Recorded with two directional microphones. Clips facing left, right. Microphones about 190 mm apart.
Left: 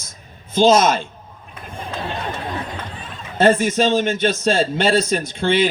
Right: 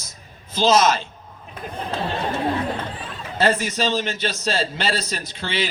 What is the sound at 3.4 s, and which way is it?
A man's voice, 50° left (ahead or behind).